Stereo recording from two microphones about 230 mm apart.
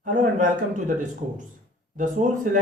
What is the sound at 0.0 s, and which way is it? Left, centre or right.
Speech, right.